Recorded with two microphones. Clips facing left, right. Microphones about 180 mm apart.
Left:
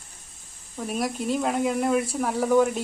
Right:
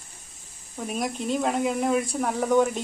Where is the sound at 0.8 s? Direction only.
Centre (ahead or behind).